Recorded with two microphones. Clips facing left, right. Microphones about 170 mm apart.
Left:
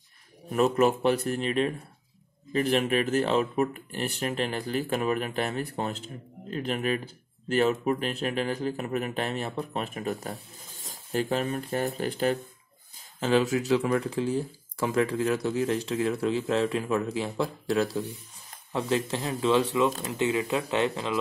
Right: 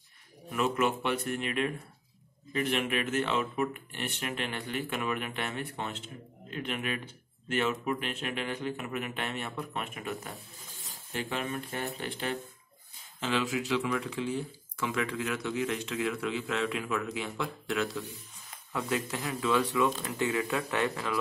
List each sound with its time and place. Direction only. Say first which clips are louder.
0.5 s speech: left 6 dB; 40° left (ahead or behind)
18.7 s speech: left 5 dB; 25° left (ahead or behind)